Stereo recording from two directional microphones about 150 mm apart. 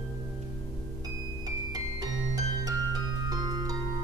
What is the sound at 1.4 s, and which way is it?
Music, 25° right (ahead or behind).